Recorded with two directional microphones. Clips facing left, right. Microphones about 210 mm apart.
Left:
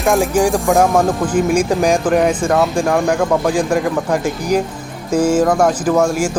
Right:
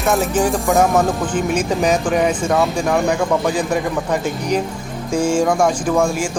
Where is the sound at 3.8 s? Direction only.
5° left (ahead or behind).